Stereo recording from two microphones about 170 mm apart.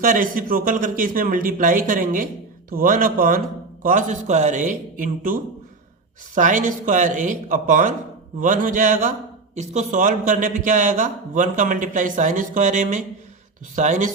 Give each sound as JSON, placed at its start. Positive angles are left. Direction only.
{"t": 0.0, "sound": "a man's voice", "side_deg": -50}